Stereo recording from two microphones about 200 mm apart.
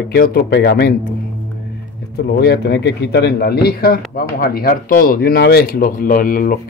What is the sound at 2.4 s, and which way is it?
Speech, 55° left (ahead or behind).